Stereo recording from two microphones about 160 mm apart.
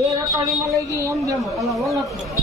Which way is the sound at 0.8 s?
20° right (ahead or behind).